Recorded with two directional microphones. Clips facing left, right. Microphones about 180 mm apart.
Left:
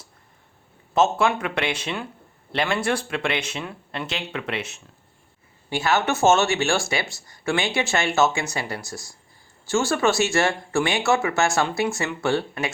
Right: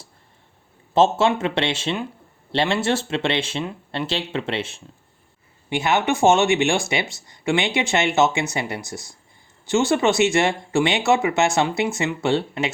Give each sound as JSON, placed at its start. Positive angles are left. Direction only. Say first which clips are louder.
{"t": 0.9, "sound": "speech", "louder": "right 3 dB", "side_deg": -30}
{"t": 5.6, "sound": "speech", "louder": "right 2 dB", "side_deg": -20}